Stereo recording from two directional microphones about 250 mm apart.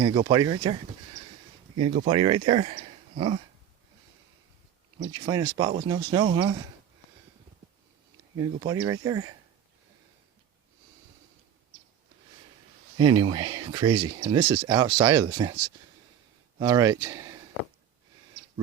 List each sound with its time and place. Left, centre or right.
0.0 s speech: centre
2.0 s speech: right
5.1 s speech: centre
8.4 s speech: centre
13.0 s speech: centre
16.6 s speech: centre